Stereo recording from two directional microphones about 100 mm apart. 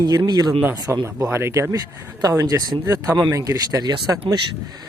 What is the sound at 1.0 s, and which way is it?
Speech, 30° right (ahead or behind).